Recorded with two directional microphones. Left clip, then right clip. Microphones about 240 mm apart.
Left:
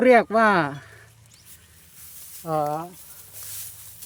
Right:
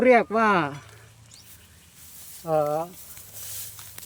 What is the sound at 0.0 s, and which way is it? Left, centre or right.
Speech, left.